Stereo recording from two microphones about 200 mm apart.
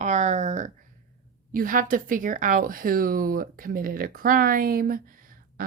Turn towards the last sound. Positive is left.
turn(degrees=-45)  # may be behind; listen again after turning